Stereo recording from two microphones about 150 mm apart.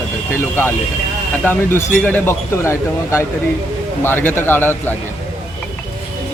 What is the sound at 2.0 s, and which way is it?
A man's voice, 15° left (ahead or behind).